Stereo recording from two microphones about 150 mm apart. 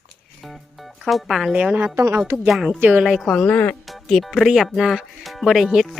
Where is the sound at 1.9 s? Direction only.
20° right (ahead or behind).